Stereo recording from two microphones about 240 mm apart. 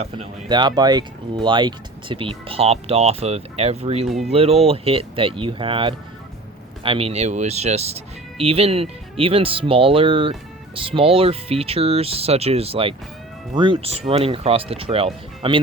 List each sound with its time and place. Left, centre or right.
0.0 s speech: right